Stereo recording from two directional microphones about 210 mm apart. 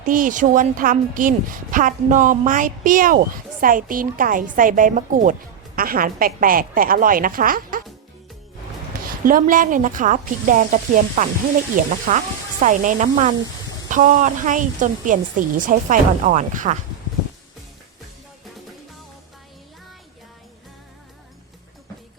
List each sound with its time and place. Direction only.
0.0 s a woman's voice: 40° right (ahead or behind)
9.0 s a woman's voice: 40° right (ahead or behind)